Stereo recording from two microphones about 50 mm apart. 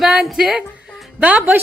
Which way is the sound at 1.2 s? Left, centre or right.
Right.